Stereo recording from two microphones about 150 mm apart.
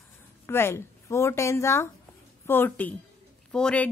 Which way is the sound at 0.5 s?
15° left (ahead or behind).